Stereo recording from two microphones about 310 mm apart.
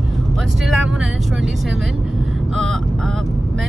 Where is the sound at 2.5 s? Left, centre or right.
Centre.